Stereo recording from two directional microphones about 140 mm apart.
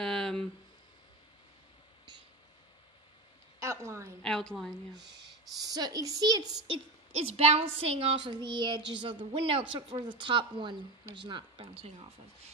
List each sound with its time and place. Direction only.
0.0 s a sound: 5° left (ahead or behind)
3.5 s a sound: 20° right (ahead or behind)
4.2 s a woman's voice: 5° left (ahead or behind)
5.6 s a woman's voice: 25° right (ahead or behind)
7.2 s a woman's voice: 45° right (ahead or behind)
8.3 s a woman's voice: 30° right (ahead or behind)